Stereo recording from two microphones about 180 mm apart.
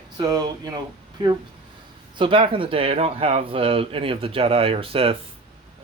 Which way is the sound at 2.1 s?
30° right (ahead or behind).